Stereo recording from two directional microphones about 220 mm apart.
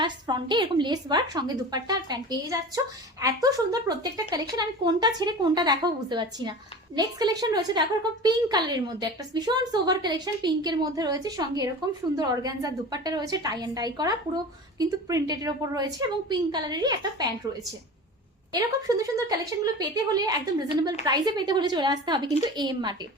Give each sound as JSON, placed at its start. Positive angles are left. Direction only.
{"t": 0.0, "sound": "a woman's voice", "side_deg": -20}
{"t": 18.5, "sound": "a woman's voice", "side_deg": -15}